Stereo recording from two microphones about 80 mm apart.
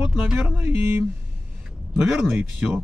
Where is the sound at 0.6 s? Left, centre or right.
Right.